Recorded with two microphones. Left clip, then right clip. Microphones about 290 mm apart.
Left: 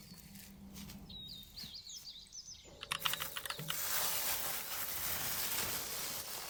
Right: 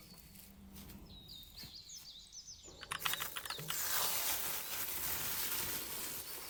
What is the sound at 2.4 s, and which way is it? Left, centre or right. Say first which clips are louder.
Typing: left 2 dB; centre.